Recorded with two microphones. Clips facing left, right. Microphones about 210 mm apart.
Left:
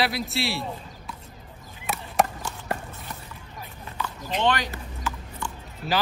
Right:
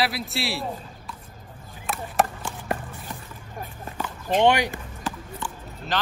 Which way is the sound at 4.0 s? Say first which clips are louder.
Right 1 dB; 45° right (ahead or behind).